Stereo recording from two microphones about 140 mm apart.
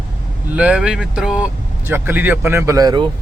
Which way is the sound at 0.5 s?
10° right (ahead or behind).